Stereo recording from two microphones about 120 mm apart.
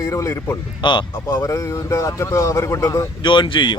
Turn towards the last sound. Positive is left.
turn(degrees=40)  # may be behind; listen again after turning